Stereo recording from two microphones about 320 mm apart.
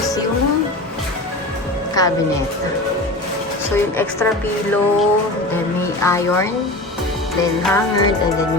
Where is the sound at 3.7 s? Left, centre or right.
Centre.